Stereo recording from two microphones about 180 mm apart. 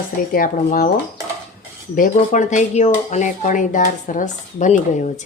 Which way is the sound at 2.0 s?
45° left (ahead or behind).